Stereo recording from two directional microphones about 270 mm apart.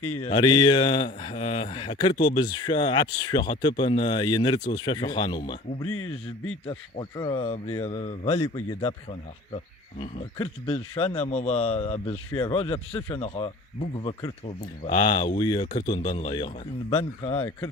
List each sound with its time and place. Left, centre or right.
0.0 s speech: left
0.3 s speech: centre
5.9 s speech: left
6.7 s a man's voice: centre
10.0 s a man's voice: left